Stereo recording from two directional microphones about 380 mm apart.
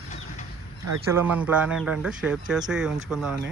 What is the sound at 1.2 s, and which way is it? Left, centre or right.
Speech, centre.